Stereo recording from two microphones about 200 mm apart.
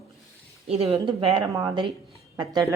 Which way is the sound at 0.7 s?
30° right (ahead or behind).